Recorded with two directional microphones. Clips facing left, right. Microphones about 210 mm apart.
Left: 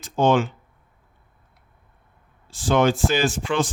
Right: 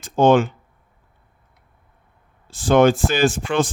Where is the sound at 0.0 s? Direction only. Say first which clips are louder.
Right 4 dB; 55° right (ahead or behind).